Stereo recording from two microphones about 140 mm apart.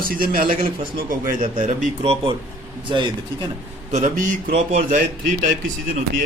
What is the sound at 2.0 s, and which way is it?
A man's voice, 40° right (ahead or behind).